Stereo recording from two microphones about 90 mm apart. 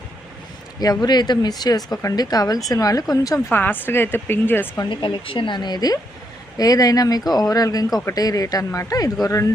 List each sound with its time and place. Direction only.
0.8 s a woman's voice: 50° left (ahead or behind)
3.5 s speech: 25° left (ahead or behind)
4.8 s a woman's voice: 60° left (ahead or behind); by 9.5 s 35° left (ahead or behind)